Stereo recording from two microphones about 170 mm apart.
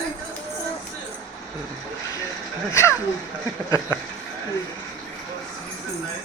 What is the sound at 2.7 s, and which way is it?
A child's voice, 15° left (ahead or behind).